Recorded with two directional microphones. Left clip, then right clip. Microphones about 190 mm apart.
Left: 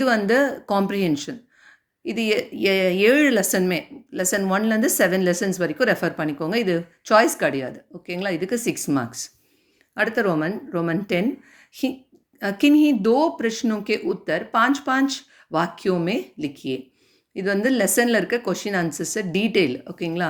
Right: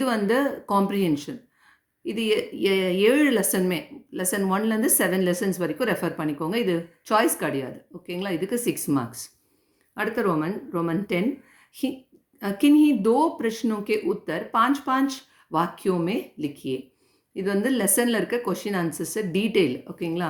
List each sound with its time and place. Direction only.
0.0 s speech: 25° left (ahead or behind)